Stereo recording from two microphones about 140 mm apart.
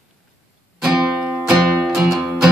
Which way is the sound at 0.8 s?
5° right (ahead or behind).